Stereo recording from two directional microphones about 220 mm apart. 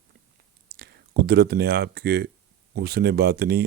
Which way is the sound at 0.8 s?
45° right (ahead or behind).